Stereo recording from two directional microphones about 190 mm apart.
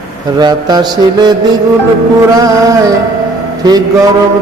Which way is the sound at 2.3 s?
20° right (ahead or behind).